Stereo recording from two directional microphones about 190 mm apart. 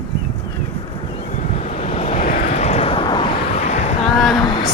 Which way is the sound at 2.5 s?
35° left (ahead or behind).